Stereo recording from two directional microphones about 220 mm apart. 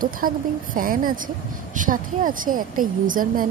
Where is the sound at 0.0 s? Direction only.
40° right (ahead or behind).